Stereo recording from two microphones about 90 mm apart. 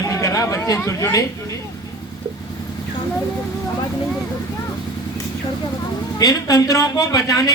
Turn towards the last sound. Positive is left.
turn(degrees=45)  # may be behind; listen again after turning